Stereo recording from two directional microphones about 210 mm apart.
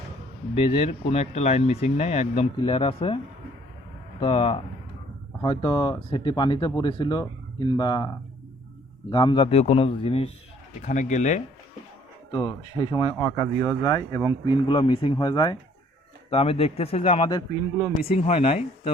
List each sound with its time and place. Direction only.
0.5 s speech: 30° left (ahead or behind)
4.2 s speech: 25° left (ahead or behind)
12.3 s speech: 20° left (ahead or behind)